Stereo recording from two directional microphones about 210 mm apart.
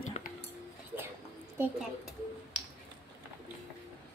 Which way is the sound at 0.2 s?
35° left (ahead or behind).